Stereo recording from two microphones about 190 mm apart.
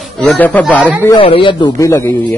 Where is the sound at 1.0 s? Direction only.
25° left (ahead or behind).